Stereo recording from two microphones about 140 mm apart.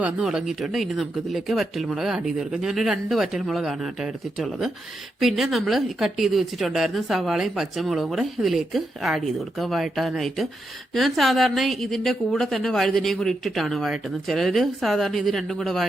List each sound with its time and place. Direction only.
0.0 s speech: 5° right (ahead or behind)